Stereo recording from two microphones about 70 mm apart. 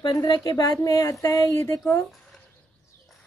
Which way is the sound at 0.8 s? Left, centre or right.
Left.